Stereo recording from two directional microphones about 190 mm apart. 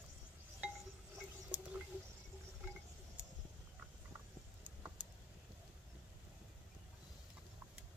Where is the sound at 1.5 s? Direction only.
5° right (ahead or behind).